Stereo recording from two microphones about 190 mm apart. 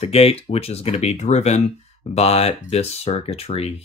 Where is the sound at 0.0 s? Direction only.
30° left (ahead or behind).